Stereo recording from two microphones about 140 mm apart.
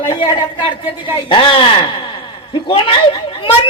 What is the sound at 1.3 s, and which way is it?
A man's voice, 35° left (ahead or behind).